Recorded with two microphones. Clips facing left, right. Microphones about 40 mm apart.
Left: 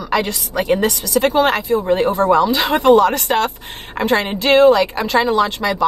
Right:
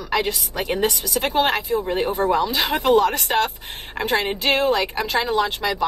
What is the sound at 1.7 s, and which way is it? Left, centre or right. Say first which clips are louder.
Speech: left 6 dB; left.